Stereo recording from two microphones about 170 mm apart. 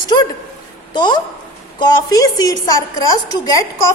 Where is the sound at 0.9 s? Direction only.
25° left (ahead or behind).